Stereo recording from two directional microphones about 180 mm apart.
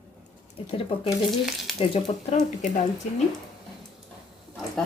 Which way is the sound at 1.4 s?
Centre (ahead or behind).